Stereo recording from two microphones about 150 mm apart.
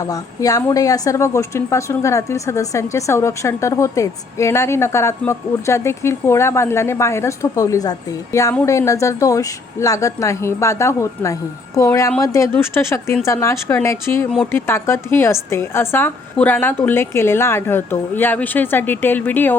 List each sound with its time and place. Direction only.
0.0 s a woman's voice: 25° left (ahead or behind)